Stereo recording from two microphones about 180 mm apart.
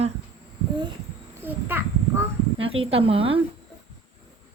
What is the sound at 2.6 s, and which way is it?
Speech, 30° right (ahead or behind).